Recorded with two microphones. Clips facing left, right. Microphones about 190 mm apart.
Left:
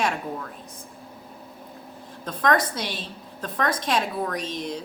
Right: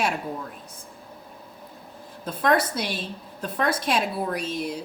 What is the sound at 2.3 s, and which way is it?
A woman's voice, 10° right (ahead or behind).